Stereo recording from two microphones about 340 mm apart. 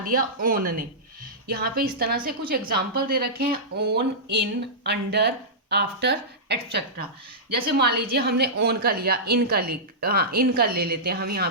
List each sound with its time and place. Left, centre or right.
0.0 s a woman's voice: right